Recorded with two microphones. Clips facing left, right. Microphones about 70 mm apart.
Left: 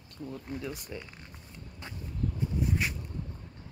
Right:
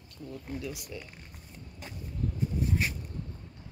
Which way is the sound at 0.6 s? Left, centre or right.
Left.